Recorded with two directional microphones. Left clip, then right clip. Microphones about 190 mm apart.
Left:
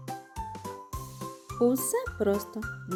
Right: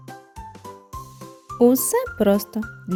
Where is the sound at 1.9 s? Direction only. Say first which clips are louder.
Right 8 dB; 45° right (ahead or behind).